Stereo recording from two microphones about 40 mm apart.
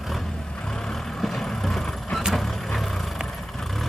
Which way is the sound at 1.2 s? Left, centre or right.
Centre.